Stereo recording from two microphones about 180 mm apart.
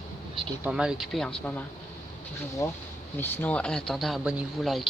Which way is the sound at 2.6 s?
15° left (ahead or behind).